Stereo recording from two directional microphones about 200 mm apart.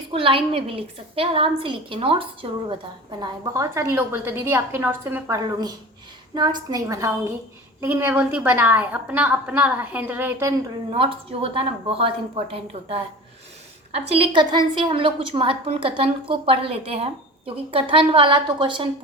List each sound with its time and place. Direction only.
0.1 s a woman's voice: 25° right (ahead or behind); by 10.5 s 10° right (ahead or behind)
10.9 s a woman's voice: 25° right (ahead or behind)
14.1 s a woman's voice: 25° right (ahead or behind)